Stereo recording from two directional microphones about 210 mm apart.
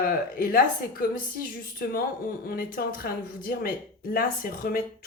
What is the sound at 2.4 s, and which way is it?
Speech, 45° left (ahead or behind).